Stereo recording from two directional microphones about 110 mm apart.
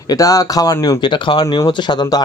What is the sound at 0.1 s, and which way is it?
Speech, 30° left (ahead or behind).